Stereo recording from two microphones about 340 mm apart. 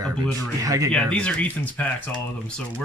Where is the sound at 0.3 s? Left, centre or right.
Centre.